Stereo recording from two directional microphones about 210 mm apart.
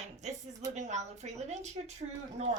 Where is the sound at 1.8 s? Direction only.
25° right (ahead or behind).